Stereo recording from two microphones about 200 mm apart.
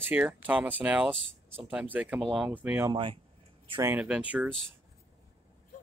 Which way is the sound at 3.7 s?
10° right (ahead or behind).